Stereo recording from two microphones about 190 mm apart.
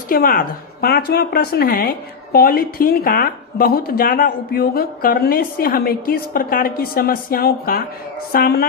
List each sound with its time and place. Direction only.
0.1 s speech: 50° left (ahead or behind)